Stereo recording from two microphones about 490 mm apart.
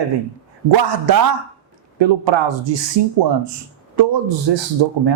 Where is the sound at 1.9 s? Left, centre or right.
Right.